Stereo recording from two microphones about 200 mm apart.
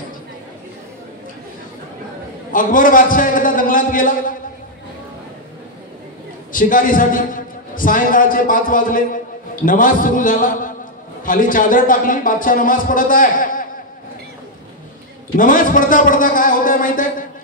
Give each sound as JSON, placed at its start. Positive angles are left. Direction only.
{"t": 2.5, "sound": "a man's voice", "side_deg": 40}
{"t": 6.5, "sound": "a man's voice", "side_deg": 40}
{"t": 15.3, "sound": "a man's voice", "side_deg": 40}